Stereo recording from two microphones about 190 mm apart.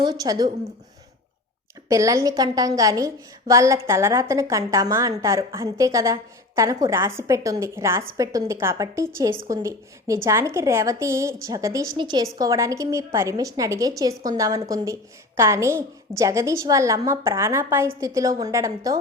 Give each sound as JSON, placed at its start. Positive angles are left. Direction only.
{"t": 0.0, "sound": "a woman's voice", "side_deg": -20}
{"t": 1.9, "sound": "a woman's voice", "side_deg": -15}